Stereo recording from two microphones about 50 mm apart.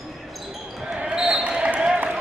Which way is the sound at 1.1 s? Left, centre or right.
Centre.